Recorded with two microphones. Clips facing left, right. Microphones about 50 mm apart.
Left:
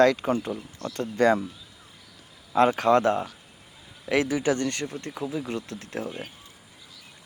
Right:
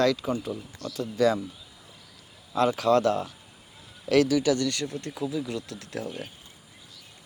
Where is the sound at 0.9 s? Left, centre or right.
Left.